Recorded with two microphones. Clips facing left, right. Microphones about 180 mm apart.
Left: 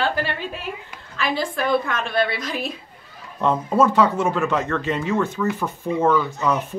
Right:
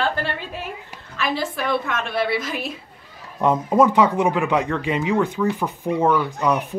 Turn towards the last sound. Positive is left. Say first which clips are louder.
# right 1 dB
turn(degrees=-15)  # may be behind; listen again after turning